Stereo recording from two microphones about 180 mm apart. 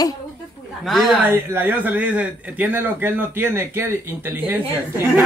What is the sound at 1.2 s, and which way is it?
A man's voice, 10° right (ahead or behind).